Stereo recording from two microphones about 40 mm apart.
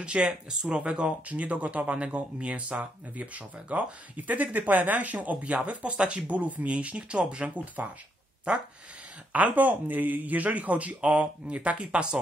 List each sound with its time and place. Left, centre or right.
0.0 s speech: right
9.3 s speech: right